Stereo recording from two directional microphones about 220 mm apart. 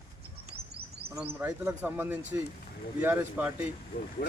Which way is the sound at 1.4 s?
5° right (ahead or behind).